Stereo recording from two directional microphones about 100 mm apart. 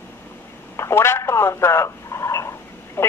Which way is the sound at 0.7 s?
25° left (ahead or behind).